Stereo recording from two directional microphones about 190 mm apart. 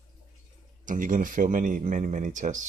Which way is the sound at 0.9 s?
45° right (ahead or behind).